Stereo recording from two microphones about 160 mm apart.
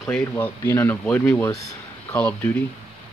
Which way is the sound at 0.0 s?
10° left (ahead or behind).